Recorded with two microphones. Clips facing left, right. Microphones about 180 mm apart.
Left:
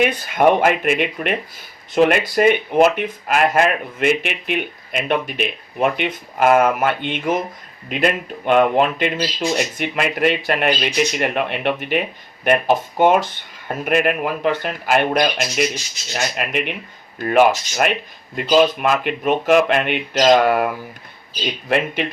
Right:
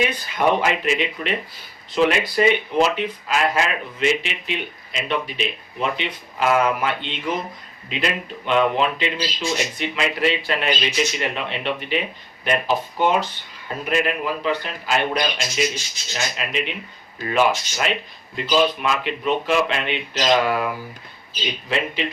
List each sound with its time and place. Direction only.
0.0 s speech: 50° left (ahead or behind)